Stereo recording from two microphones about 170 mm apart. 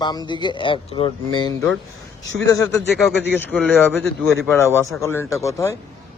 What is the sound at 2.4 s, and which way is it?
Speech, 20° left (ahead or behind).